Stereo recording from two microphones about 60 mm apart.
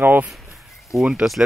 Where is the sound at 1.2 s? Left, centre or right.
Centre.